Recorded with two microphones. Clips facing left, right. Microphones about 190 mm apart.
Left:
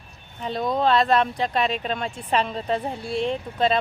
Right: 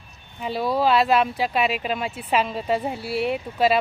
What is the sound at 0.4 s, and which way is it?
Speech, 5° right (ahead or behind).